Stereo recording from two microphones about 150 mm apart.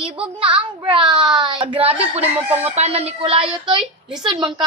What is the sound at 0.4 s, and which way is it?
A woman's voice, 35° right (ahead or behind).